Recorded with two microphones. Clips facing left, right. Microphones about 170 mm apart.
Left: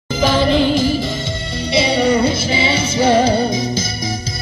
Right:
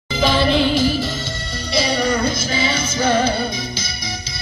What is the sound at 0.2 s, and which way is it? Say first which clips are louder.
Music: left 2 dB; 10° left (ahead or behind).